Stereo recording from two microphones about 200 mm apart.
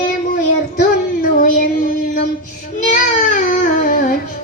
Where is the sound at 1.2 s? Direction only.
45° left (ahead or behind).